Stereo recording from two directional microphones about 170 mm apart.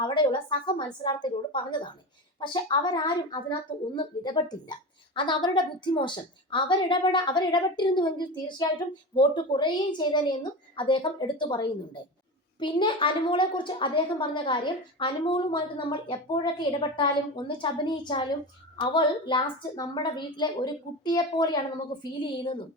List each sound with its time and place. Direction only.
0.0 s a woman's voice: 25° left (ahead or behind)